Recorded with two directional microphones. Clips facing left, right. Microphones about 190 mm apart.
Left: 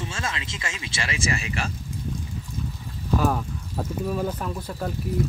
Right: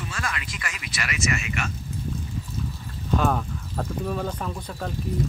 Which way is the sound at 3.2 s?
5° left (ahead or behind).